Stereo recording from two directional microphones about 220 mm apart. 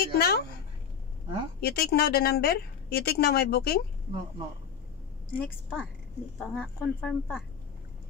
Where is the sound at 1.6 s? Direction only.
45° left (ahead or behind).